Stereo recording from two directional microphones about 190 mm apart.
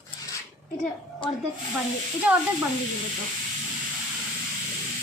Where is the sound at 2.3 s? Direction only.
5° right (ahead or behind).